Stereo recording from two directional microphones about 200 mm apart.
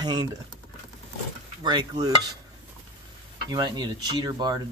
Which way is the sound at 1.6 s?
20° right (ahead or behind).